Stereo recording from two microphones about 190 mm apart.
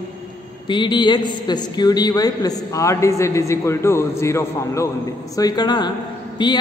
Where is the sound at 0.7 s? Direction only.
25° left (ahead or behind).